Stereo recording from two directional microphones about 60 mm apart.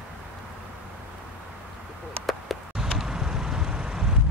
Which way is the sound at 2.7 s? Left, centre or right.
Centre.